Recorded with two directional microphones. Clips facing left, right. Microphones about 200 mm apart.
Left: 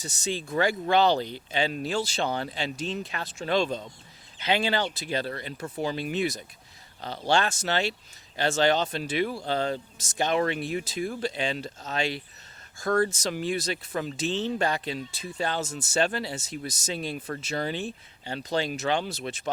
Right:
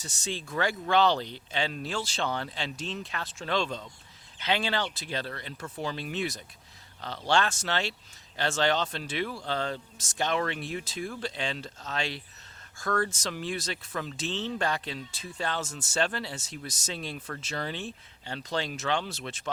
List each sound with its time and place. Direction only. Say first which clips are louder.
0.0 s speech: left 5 dB; 10° left (ahead or behind)